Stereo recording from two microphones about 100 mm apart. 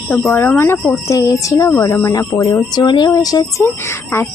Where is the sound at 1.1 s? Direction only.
35° left (ahead or behind).